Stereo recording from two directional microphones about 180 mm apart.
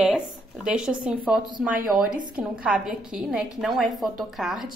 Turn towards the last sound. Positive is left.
turn(degrees=0)  # may be behind; listen again after turning